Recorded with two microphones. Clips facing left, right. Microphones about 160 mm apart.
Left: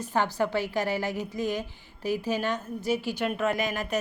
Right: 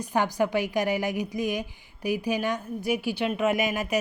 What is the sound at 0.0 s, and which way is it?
A woman's voice, 15° right (ahead or behind).